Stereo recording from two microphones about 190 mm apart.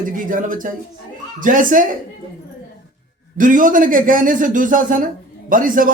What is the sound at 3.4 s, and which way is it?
A man's voice, 45° right (ahead or behind).